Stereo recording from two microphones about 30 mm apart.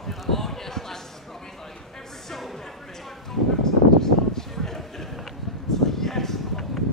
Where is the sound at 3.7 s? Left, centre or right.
Centre.